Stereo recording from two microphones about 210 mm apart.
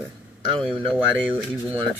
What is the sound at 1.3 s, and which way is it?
Speech, 5° right (ahead or behind).